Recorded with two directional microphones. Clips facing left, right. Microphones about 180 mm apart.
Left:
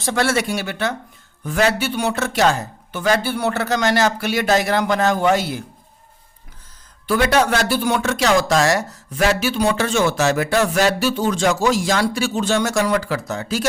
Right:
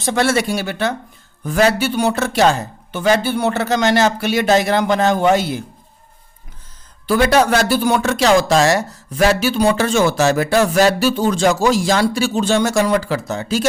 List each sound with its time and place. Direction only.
0.0 s speech: 20° right (ahead or behind)
7.1 s speech: 35° right (ahead or behind)
9.1 s speech: 35° right (ahead or behind)